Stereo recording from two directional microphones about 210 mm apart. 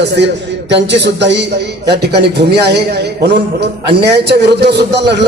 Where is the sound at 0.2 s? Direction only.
55° right (ahead or behind).